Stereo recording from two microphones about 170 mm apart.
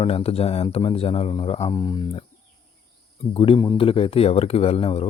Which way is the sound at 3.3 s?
30° left (ahead or behind).